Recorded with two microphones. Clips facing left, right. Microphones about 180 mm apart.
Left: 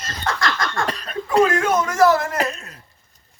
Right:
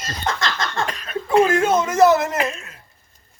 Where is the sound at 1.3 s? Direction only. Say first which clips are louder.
Right 1 dB; 25° right (ahead or behind).